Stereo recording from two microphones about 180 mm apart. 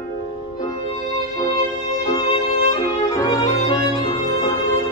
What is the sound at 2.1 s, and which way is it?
Violin, 25° left (ahead or behind).